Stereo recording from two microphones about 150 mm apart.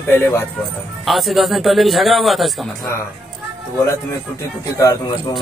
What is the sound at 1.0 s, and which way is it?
A man's voice, centre (ahead or behind).